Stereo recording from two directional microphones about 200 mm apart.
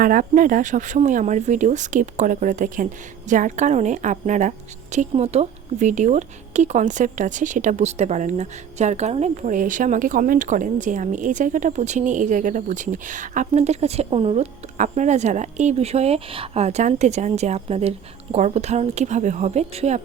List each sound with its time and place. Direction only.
0.0 s a woman's voice: 45° right (ahead or behind)